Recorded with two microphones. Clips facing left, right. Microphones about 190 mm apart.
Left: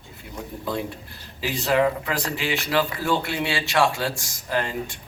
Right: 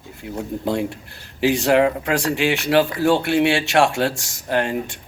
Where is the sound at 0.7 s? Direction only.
75° right (ahead or behind).